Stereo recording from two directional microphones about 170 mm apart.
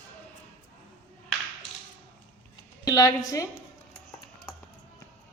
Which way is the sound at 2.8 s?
20° left (ahead or behind).